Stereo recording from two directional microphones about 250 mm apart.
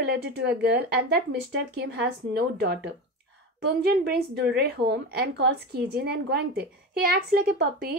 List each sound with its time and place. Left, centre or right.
0.0 s a woman's voice: right